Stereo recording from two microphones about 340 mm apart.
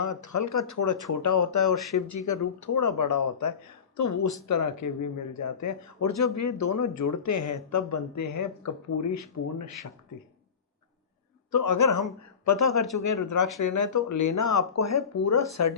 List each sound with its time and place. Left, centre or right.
0.0 s speech: left
11.5 s speech: left